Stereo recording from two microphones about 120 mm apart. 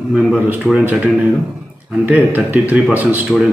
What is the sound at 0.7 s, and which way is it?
Speech, 10° right (ahead or behind).